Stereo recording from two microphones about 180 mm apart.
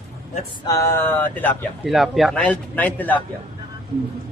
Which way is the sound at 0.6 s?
15° left (ahead or behind).